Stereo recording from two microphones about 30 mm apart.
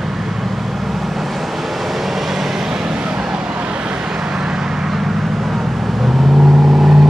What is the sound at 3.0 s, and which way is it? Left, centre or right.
Vehicle, right.